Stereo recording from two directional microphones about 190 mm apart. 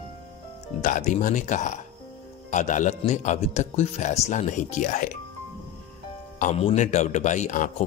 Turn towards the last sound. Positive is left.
turn(degrees=40)  # may be behind; listen again after turning